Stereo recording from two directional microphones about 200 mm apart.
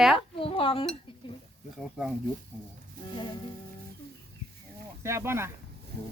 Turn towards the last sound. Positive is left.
turn(degrees=-15)  # may be behind; listen again after turning